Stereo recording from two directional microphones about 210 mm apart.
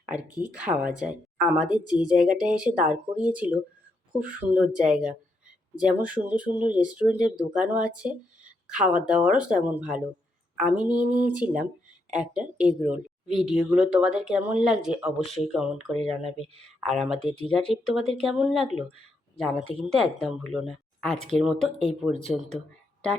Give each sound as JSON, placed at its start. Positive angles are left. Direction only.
{"t": 0.0, "sound": "speech", "side_deg": -5}
{"t": 1.6, "sound": "speech", "side_deg": 20}
{"t": 1.9, "sound": "speech", "side_deg": -5}